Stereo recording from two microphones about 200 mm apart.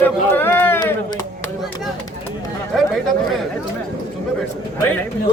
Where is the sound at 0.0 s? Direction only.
10° left (ahead or behind).